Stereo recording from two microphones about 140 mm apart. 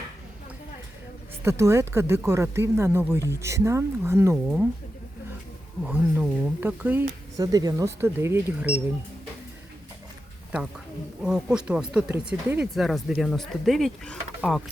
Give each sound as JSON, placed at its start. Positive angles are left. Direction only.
{"t": 1.5, "sound": "speech", "side_deg": -20}
{"t": 5.8, "sound": "speech", "side_deg": -10}
{"t": 7.3, "sound": "speech", "side_deg": -25}
{"t": 11.2, "sound": "speech", "side_deg": -5}